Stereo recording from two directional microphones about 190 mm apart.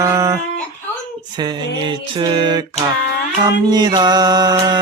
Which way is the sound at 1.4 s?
25° right (ahead or behind).